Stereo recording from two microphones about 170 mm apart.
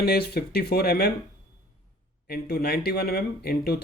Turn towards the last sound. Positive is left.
turn(degrees=65)  # may be behind; listen again after turning